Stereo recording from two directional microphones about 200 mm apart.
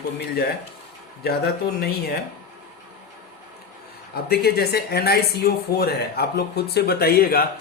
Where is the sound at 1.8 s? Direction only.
55° left (ahead or behind).